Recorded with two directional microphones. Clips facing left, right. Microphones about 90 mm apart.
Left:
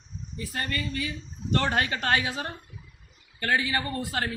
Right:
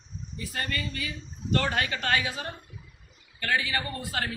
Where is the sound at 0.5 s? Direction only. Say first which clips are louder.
Left 1 dB; 25° left (ahead or behind).